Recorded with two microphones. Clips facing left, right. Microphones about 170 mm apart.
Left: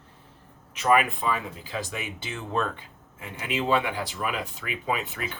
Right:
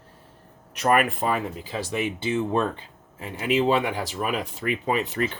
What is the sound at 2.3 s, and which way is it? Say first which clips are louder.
Speech: right 5 dB; 20° right (ahead or behind).